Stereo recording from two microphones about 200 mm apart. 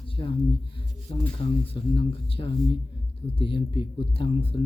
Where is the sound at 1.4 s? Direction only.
30° left (ahead or behind).